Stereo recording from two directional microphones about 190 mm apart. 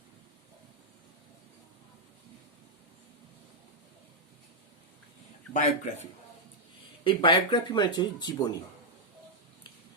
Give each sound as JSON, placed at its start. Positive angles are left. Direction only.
{"t": 5.5, "sound": "speech", "side_deg": 40}
{"t": 7.0, "sound": "speech", "side_deg": 25}